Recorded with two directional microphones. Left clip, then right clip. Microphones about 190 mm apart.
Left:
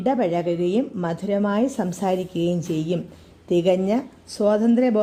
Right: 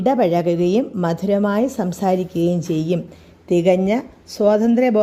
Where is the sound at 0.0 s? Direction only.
10° right (ahead or behind).